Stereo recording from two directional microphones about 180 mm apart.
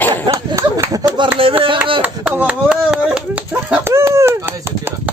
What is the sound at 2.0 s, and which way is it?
Speech, 10° right (ahead or behind).